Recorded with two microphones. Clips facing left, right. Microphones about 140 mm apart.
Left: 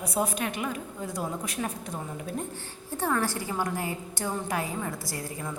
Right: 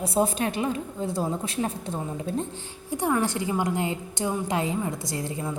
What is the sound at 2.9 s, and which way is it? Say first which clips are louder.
A woman's voice: right 3 dB; 15° right (ahead or behind).